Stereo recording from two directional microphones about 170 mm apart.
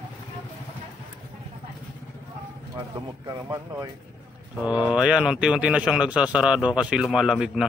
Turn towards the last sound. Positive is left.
turn(degrees=-5)  # may be behind; listen again after turning